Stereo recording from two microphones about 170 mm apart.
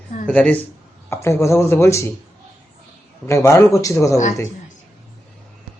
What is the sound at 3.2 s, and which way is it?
Speech, 15° left (ahead or behind).